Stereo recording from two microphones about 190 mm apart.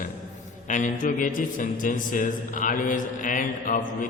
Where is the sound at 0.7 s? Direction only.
40° left (ahead or behind).